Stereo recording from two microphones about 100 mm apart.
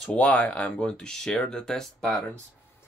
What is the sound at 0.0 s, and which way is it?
Speech, 15° left (ahead or behind).